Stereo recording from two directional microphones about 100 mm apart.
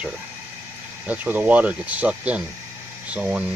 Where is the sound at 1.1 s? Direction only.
15° right (ahead or behind).